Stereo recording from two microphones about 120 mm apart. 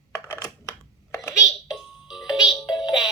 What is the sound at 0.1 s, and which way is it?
Computer keyboard, 25° left (ahead or behind).